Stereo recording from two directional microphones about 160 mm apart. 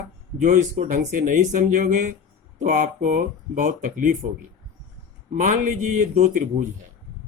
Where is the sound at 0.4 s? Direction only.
60° right (ahead or behind).